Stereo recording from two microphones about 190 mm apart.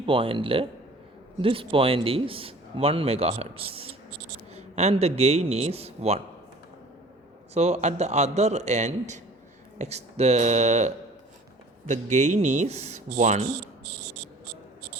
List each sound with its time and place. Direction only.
0.0 s a man's voice: 30° right (ahead or behind)
7.5 s a man's voice: 35° right (ahead or behind)